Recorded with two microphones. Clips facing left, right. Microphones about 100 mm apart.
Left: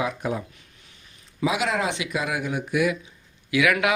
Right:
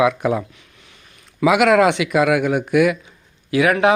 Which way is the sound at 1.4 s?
65° right (ahead or behind).